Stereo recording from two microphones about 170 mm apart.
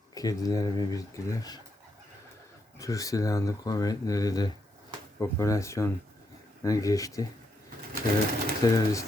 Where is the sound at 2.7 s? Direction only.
20° left (ahead or behind).